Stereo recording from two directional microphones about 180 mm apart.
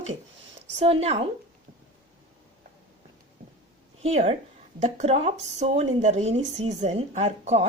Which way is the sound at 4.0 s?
35° right (ahead or behind).